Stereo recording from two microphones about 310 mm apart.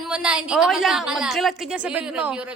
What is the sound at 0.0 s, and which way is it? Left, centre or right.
A woman's voice, centre.